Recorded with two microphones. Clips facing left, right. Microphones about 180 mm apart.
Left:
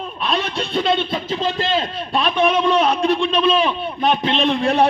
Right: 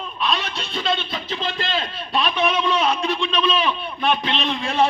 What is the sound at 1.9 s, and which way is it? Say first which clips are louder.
A man's voice: left 4 dB; 50° left (ahead or behind).